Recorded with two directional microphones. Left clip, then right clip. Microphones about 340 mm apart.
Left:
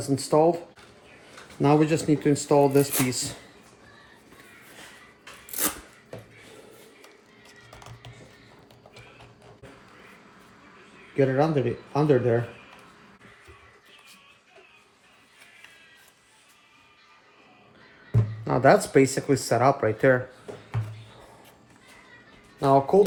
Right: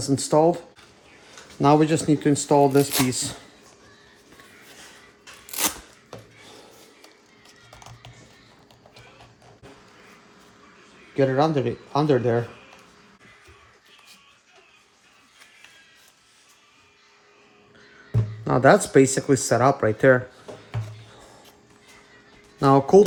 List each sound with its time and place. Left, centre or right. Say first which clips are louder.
0.0 s speech: right 2 dB; right
1.6 s speech: right 3 dB; right
5.5 s a sound: right 4 dB; centre
7.0 s music: even; centre
11.2 s speech: right 2 dB; right
18.4 s speech: right 2 dB; right
22.6 s speech: right 4 dB; right